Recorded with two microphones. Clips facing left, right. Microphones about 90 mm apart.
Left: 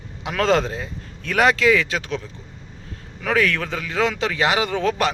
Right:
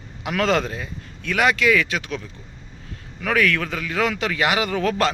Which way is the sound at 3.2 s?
25° left (ahead or behind).